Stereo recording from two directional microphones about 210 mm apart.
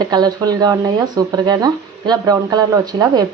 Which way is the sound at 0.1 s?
20° right (ahead or behind).